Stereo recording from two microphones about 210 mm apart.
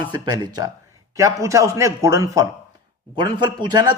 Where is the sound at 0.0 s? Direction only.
20° right (ahead or behind).